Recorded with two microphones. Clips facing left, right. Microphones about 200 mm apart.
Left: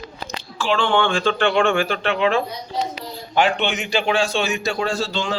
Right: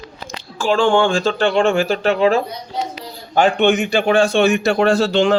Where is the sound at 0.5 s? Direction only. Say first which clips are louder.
Right 5 dB; 45° right (ahead or behind).